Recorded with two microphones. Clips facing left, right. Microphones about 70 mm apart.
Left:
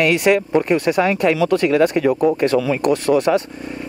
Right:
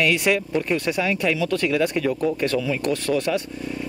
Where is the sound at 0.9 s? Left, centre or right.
Left.